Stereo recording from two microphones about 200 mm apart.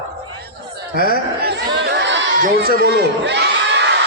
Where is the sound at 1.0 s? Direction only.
50° right (ahead or behind).